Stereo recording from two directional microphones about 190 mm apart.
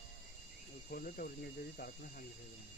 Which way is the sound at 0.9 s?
50° left (ahead or behind).